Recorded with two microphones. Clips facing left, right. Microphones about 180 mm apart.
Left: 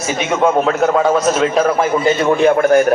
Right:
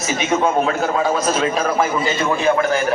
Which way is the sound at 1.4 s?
55° left (ahead or behind).